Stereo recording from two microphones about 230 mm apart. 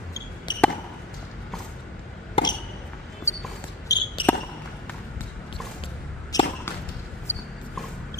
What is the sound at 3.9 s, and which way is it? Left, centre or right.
Basketball bounce, centre.